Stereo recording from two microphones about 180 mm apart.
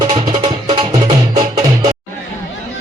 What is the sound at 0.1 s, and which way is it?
Music, 25° right (ahead or behind).